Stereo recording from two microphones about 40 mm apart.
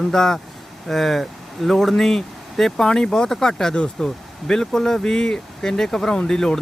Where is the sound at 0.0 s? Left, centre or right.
Centre.